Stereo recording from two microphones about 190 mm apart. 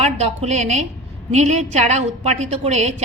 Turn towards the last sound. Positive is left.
turn(degrees=-35)  # may be behind; listen again after turning